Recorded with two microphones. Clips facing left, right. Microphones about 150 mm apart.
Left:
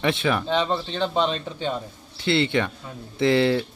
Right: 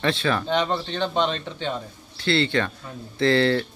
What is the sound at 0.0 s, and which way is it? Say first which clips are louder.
Speech: left 1 dB; 15° left (ahead or behind).